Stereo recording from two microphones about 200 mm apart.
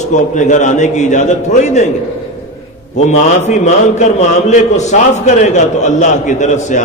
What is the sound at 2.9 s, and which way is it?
A man's voice, 35° left (ahead or behind).